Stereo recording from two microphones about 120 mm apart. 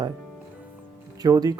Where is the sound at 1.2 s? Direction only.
35° right (ahead or behind).